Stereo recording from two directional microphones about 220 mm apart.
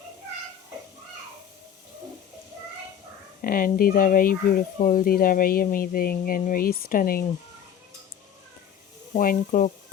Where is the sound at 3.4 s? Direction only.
40° left (ahead or behind).